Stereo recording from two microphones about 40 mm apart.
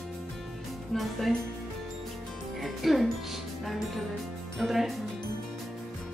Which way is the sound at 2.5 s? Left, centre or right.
Centre.